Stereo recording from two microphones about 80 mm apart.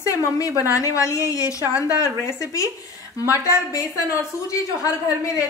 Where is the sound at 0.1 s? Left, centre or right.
Left.